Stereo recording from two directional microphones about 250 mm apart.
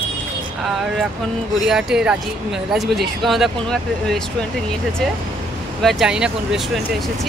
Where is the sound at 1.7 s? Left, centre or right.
Centre.